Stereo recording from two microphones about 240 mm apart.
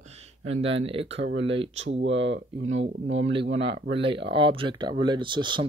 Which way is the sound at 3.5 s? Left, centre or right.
Right.